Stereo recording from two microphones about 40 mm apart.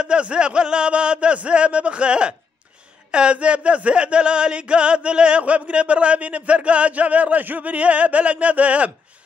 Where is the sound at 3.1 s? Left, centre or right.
Right.